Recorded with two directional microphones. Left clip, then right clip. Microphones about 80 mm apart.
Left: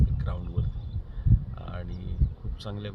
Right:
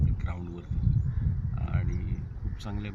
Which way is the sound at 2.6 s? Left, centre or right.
Centre.